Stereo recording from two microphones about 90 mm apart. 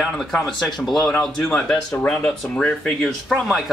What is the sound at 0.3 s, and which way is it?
A man's voice, centre (ahead or behind).